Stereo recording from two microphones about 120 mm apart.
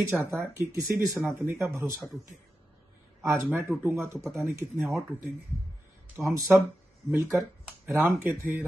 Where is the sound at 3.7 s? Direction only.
25° right (ahead or behind).